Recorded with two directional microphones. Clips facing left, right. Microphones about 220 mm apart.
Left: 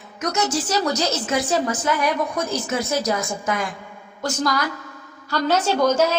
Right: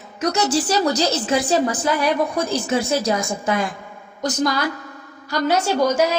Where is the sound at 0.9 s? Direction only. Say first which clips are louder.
Right 3 dB; 30° right (ahead or behind).